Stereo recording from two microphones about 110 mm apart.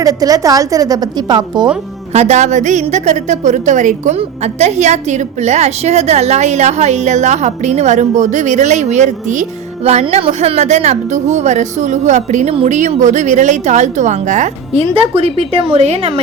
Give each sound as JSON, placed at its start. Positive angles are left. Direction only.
{"t": 0.0, "sound": "a woman's voice", "side_deg": -35}
{"t": 2.1, "sound": "a woman's voice", "side_deg": -90}
{"t": 9.8, "sound": "a woman's voice", "side_deg": -80}